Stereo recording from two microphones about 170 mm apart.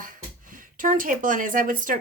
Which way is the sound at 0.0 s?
55° right (ahead or behind).